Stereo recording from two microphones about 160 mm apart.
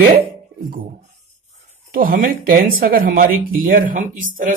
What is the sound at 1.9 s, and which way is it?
Speech, 65° right (ahead or behind).